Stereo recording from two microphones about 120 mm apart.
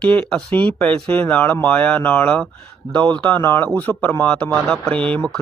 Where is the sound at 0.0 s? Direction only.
10° left (ahead or behind).